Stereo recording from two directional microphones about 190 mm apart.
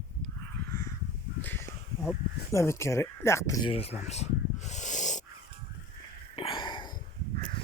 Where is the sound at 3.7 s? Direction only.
30° left (ahead or behind).